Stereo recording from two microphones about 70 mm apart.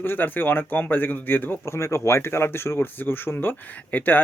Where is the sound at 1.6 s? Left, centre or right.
Left.